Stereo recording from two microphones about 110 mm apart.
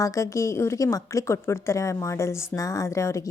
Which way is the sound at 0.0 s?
30° left (ahead or behind).